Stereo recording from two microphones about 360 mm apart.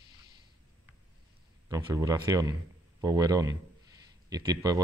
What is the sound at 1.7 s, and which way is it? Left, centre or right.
Speech, centre.